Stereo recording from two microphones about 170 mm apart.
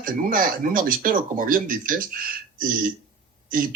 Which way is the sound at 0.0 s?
55° right (ahead or behind).